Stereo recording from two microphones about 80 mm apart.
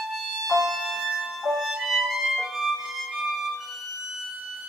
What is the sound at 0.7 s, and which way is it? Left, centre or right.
Music, centre.